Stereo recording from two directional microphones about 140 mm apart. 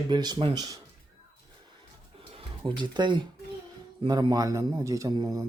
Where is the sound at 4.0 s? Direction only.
30° right (ahead or behind).